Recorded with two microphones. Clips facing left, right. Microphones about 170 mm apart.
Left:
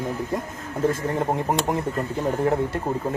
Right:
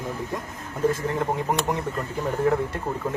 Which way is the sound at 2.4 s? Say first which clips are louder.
Right 1 dB; 30° left (ahead or behind).